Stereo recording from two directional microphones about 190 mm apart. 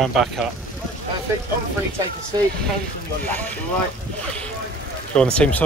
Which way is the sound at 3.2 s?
10° left (ahead or behind).